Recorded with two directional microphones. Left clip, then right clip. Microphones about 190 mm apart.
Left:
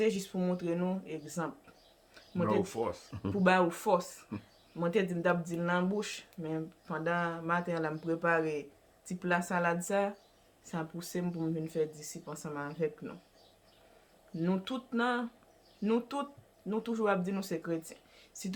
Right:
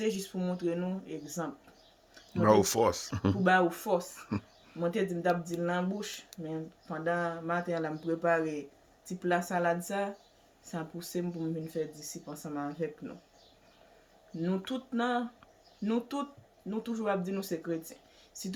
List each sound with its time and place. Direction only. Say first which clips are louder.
0.0 s speech: left 2 dB; 25° left (ahead or behind)
2.4 s speech: right 7 dB; 70° right (ahead or behind)
3.4 s speech: even; 25° left (ahead or behind)
4.2 s speech: right 7 dB; 75° right (ahead or behind)
4.8 s speech: even; 25° left (ahead or behind)
14.4 s speech: even; 25° left (ahead or behind)